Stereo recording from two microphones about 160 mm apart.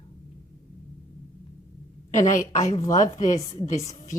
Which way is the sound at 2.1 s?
50° left (ahead or behind).